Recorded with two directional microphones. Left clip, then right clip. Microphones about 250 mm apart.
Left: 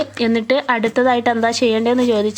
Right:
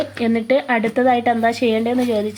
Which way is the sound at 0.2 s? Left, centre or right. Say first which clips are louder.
Left 1 dB; centre.